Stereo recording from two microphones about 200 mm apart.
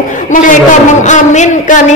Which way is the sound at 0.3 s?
40° left (ahead or behind).